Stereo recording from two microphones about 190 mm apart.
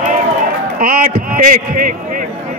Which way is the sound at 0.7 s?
50° right (ahead or behind).